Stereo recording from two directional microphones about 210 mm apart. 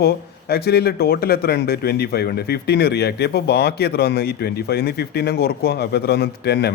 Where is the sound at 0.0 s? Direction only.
50° left (ahead or behind).